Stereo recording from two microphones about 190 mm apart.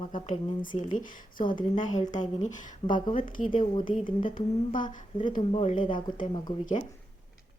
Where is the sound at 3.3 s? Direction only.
45° left (ahead or behind).